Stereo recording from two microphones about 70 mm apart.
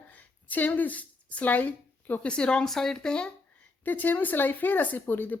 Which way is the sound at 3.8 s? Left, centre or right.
Left.